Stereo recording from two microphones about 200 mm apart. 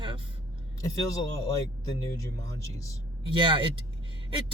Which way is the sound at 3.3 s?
25° right (ahead or behind).